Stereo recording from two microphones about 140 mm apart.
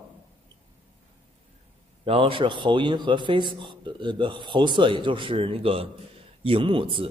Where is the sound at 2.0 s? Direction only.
40° right (ahead or behind).